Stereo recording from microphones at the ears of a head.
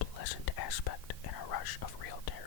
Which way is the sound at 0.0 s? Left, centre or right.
Left.